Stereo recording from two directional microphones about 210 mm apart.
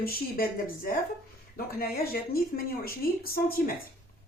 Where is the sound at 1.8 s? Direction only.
45° left (ahead or behind).